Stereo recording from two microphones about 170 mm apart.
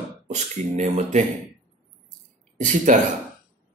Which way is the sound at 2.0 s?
50° right (ahead or behind).